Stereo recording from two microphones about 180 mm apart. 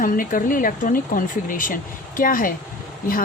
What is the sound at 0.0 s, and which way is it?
Speech, 50° left (ahead or behind).